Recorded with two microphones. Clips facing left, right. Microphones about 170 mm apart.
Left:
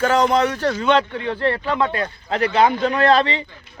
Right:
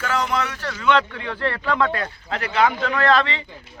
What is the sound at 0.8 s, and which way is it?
A man's voice, 25° left (ahead or behind).